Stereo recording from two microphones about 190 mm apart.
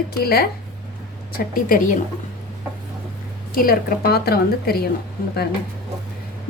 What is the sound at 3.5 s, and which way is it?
A woman's voice, 50° left (ahead or behind).